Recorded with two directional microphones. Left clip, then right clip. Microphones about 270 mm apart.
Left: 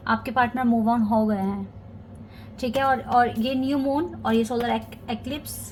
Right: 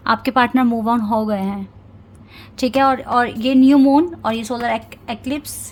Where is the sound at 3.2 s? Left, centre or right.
Right.